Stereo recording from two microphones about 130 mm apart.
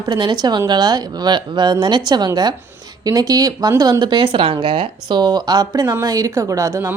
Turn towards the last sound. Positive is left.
turn(degrees=-20)  # may be behind; listen again after turning